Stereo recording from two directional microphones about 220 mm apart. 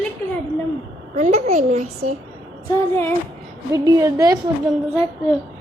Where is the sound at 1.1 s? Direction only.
35° right (ahead or behind).